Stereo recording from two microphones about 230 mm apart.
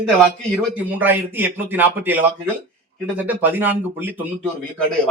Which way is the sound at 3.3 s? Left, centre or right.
Centre.